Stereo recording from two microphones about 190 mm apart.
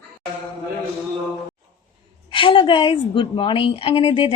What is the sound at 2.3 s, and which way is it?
A woman's voice, 25° left (ahead or behind).